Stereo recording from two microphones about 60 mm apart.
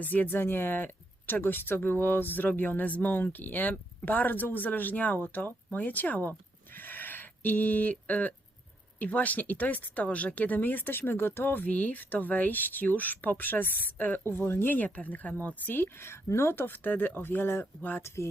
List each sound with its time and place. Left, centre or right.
0.0 s speech: left
18.0 s speech: left